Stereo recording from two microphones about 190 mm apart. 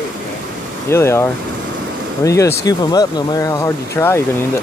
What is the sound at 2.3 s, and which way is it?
Speech, 15° left (ahead or behind).